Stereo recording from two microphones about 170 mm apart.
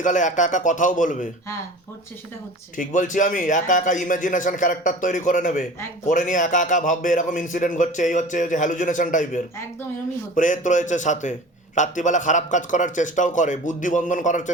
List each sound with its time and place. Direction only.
0.0 s a man's voice: 45° left (ahead or behind)
2.7 s a man's voice: 50° left (ahead or behind)